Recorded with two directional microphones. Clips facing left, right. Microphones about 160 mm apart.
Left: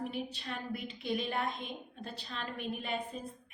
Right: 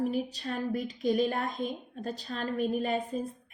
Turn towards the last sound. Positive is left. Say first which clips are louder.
# right 8 dB
turn(degrees=-40)  # may be behind; listen again after turning